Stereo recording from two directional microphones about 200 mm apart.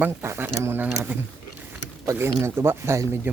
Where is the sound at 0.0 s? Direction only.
10° right (ahead or behind).